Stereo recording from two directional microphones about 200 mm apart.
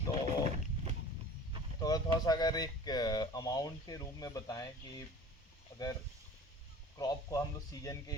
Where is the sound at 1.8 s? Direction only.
20° left (ahead or behind).